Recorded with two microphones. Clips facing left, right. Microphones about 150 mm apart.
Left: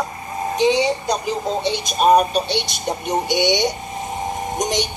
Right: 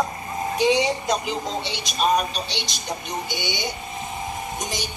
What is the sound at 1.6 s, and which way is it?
Speech, 50° left (ahead or behind).